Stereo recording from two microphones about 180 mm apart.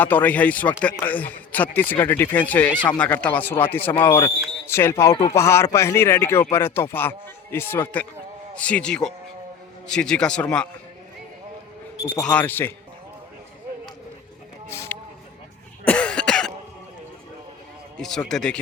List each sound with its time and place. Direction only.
0.0 s a man's voice: 10° left (ahead or behind)
12.1 s speech: 5° left (ahead or behind)
14.7 s a sound: 15° left (ahead or behind)
15.8 s cough: 5° left (ahead or behind)
17.9 s a sound: 5° left (ahead or behind)
18.3 s a man's voice: 5° left (ahead or behind)